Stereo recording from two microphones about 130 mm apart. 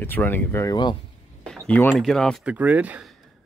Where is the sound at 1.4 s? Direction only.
5° left (ahead or behind).